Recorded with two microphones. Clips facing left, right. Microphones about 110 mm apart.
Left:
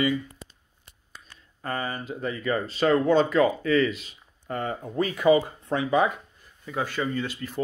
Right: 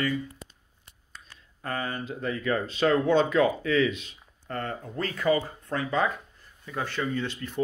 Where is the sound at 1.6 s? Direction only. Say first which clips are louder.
Left 1 dB; centre (ahead or behind).